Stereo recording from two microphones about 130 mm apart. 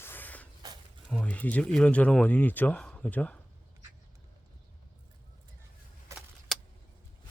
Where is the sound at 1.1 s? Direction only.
10° left (ahead or behind).